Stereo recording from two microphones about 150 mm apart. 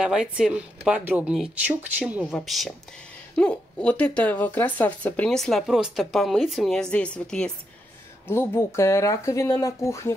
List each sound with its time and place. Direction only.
0.0 s speech: 5° right (ahead or behind)
8.3 s speech: 15° left (ahead or behind)